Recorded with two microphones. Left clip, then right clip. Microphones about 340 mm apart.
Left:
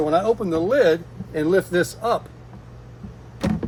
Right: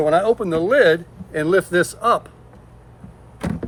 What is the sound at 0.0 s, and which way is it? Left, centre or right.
Speech, right.